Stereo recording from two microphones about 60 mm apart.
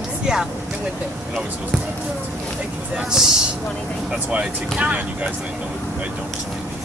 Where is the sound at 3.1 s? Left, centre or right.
Centre.